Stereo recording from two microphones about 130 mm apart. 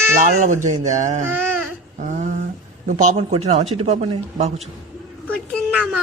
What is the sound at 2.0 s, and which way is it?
Humming, 65° right (ahead or behind).